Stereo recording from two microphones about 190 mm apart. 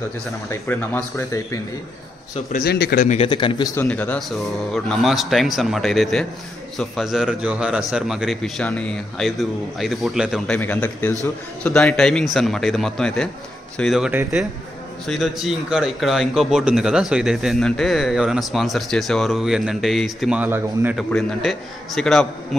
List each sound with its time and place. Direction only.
0.5 s speech: 15° left (ahead or behind)
2.5 s a man's voice: 55° left (ahead or behind)
3.1 s a man's voice: 30° left (ahead or behind)
3.8 s a man's voice: 5° left (ahead or behind); by 21.0 s 10° right (ahead or behind)
21.1 s a man's voice: centre (ahead or behind)